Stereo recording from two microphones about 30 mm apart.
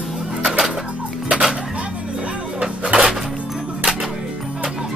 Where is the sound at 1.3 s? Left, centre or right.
Right.